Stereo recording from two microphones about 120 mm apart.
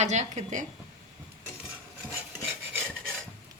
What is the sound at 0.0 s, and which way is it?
Speech, 70° right (ahead or behind).